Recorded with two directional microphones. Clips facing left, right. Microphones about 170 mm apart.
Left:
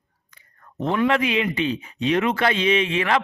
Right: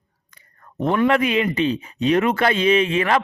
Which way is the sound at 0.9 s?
50° right (ahead or behind).